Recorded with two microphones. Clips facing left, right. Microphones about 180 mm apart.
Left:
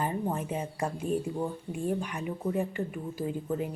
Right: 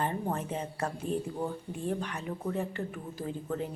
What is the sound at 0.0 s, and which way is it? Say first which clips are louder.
Speech: left 1 dB; 10° left (ahead or behind).